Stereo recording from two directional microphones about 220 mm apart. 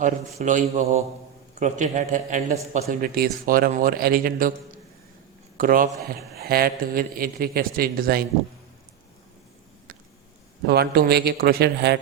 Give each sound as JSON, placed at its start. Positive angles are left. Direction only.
{"t": 0.0, "sound": "a man's voice", "side_deg": -35}
{"t": 5.5, "sound": "a man's voice", "side_deg": -40}
{"t": 10.7, "sound": "a man's voice", "side_deg": -45}